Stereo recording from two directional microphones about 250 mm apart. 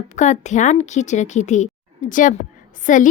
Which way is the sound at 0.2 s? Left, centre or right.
Left.